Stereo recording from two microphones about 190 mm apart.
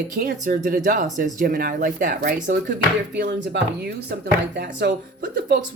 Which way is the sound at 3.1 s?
60° right (ahead or behind).